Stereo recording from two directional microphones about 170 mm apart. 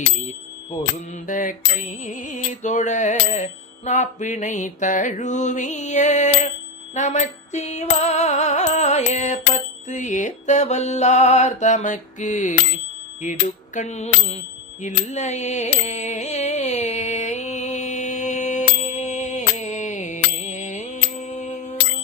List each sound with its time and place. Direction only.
1.3 s music: 50° left (ahead or behind)
13.7 s mantra: 40° left (ahead or behind)
14.8 s carnatic music: 45° left (ahead or behind)